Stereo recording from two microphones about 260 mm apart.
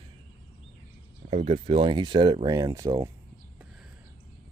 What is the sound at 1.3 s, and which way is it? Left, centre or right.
Speech, right.